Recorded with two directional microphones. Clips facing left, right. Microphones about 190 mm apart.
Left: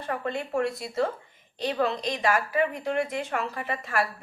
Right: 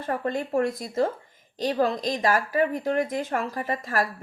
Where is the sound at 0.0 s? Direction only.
45° right (ahead or behind).